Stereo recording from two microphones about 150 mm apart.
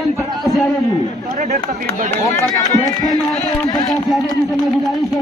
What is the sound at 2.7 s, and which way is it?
Speech, 25° left (ahead or behind).